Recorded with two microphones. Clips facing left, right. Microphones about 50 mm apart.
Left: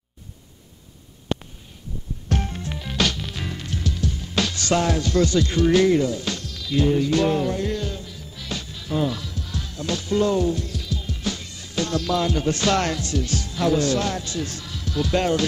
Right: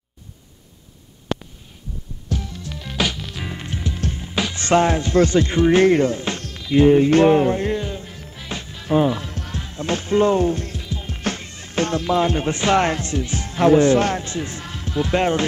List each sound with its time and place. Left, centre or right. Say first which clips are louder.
2.2 s music: left 2 dB; left
3.2 s music: even; centre
3.4 s music: right 1 dB; right
4.6 s speech: right 7 dB; right
5.9 s speech: right 3 dB; right
8.4 s music: right 1 dB; right
9.3 s music: right 2 dB; right
9.6 s speech: right 4 dB; right
10.8 s music: right 2 dB; right
12.0 s speech: right 3 dB; right
13.5 s speech: right 8 dB; right